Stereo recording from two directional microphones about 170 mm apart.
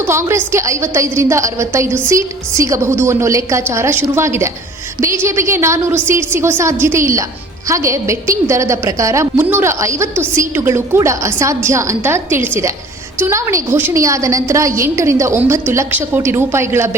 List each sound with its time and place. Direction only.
0.0 s a woman's voice: 15° right (ahead or behind)